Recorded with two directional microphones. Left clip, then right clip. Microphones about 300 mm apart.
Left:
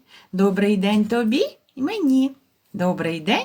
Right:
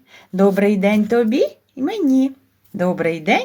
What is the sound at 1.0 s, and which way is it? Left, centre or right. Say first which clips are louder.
Speech: right 5 dB; centre.